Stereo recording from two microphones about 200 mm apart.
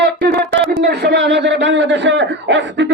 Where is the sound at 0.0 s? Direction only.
60° right (ahead or behind).